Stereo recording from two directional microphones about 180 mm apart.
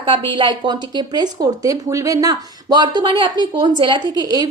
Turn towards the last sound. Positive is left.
turn(degrees=-20)  # may be behind; listen again after turning